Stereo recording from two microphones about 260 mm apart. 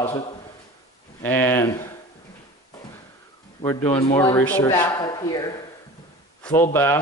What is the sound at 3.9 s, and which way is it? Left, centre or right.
Speech, left.